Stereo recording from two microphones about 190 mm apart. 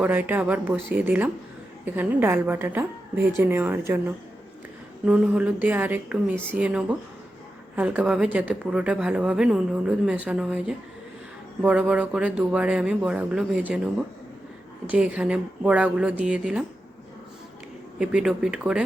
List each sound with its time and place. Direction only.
0.0 s a woman's voice: 10° right (ahead or behind)
14.8 s a woman's voice: 5° right (ahead or behind)
18.0 s a woman's voice: 5° right (ahead or behind)